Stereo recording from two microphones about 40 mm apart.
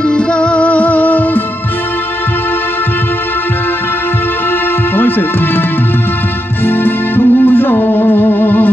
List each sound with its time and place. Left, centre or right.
0.1 s music: left
4.9 s speech: left
6.6 s music: left